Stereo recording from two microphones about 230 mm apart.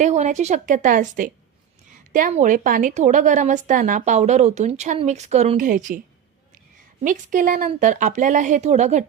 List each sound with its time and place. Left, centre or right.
0.0 s a woman's voice: right
7.0 s a woman's voice: right